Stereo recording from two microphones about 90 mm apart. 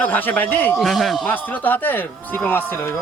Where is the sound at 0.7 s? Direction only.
Centre (ahead or behind).